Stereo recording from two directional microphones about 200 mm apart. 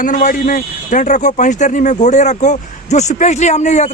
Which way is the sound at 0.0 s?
40° left (ahead or behind).